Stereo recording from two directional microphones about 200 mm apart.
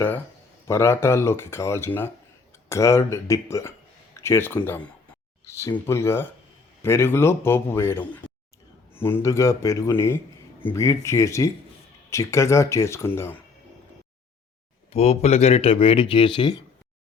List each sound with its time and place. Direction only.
0.7 s a man's voice: 15° left (ahead or behind)
14.9 s speech: 30° left (ahead or behind)